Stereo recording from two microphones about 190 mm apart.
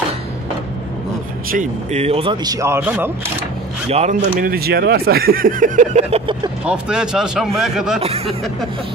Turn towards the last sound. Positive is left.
turn(degrees=0)  # may be behind; listen again after turning